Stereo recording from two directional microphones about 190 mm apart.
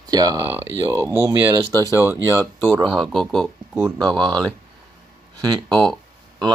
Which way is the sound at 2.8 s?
Centre (ahead or behind).